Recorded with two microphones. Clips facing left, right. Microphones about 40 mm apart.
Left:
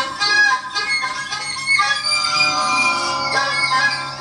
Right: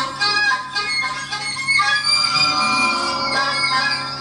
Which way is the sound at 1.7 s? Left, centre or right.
Centre.